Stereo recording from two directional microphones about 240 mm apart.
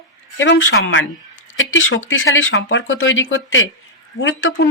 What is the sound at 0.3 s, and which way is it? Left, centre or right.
Speech, left.